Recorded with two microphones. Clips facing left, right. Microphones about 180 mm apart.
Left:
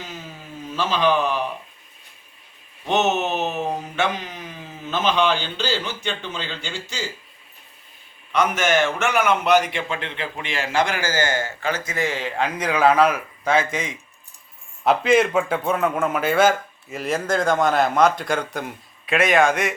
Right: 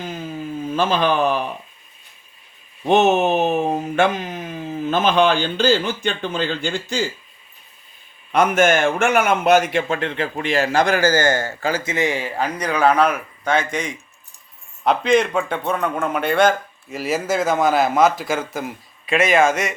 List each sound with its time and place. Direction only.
0.7 s speech: 50° right (ahead or behind)
2.8 s speech: 50° right (ahead or behind)
8.3 s speech: 50° right (ahead or behind); by 11.9 s 30° right (ahead or behind)
11.9 s speech: 15° right (ahead or behind)